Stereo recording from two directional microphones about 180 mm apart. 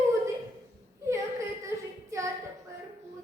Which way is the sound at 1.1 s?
15° right (ahead or behind).